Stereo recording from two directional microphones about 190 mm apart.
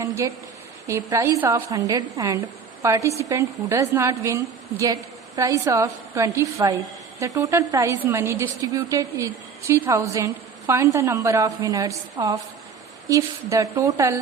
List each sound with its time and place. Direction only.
0.0 s a woman's voice: 15° right (ahead or behind)